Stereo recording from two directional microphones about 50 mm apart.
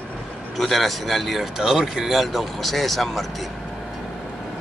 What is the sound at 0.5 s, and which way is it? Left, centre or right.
Speech, centre.